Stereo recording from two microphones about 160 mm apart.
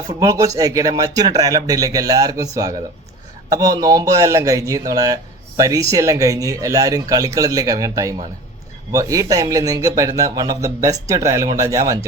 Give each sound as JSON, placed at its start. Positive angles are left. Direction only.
{"t": 0.1, "sound": "speech", "side_deg": -20}